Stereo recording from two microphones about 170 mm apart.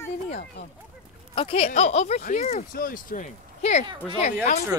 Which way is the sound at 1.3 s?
30° left (ahead or behind).